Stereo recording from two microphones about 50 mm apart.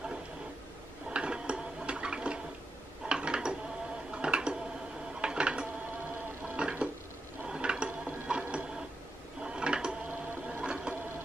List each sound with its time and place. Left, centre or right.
1.1 s a sound: centre
6.6 s dishes: centre
7.4 s gears: centre
8.3 s printer: right
9.4 s a sound: centre
10.6 s sewing machine: centre